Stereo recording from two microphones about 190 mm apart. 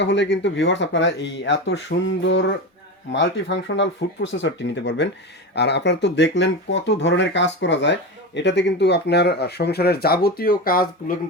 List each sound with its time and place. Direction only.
0.0 s speech: 65° left (ahead or behind); by 10.8 s 50° left (ahead or behind)